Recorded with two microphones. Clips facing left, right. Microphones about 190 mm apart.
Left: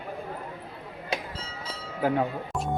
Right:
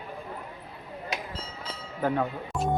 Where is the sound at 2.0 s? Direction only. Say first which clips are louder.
Left 2 dB; 10° left (ahead or behind).